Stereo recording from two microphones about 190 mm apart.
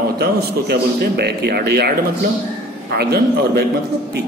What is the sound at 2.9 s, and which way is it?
Speech, 55° right (ahead or behind).